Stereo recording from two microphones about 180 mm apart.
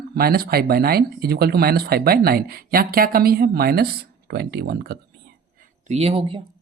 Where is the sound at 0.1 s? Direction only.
60° right (ahead or behind).